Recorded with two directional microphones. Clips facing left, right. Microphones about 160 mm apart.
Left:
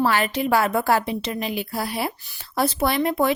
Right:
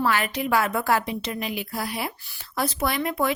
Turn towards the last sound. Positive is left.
turn(degrees=30)  # may be behind; listen again after turning